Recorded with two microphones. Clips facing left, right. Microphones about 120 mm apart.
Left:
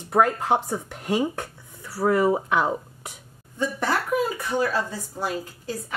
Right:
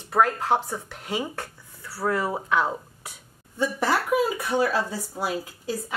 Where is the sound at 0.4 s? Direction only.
15° left (ahead or behind).